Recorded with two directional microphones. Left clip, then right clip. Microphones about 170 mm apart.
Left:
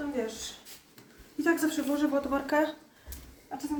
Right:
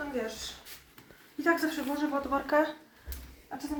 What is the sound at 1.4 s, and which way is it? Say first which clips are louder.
Speech: left 1 dB; 40° left (ahead or behind).